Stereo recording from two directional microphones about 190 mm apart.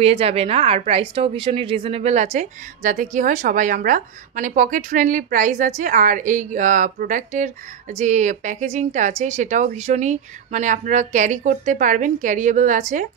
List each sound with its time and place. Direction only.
0.0 s a woman's voice: 30° right (ahead or behind)